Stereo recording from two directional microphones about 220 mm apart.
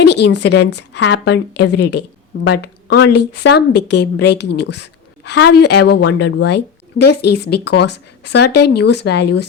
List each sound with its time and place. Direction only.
0.0 s a woman's voice: 50° left (ahead or behind)